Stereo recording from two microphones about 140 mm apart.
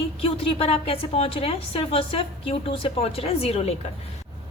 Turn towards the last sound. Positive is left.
turn(degrees=45)  # may be behind; listen again after turning